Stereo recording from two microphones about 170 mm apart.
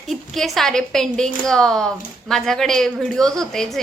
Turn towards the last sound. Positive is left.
turn(degrees=0)  # may be behind; listen again after turning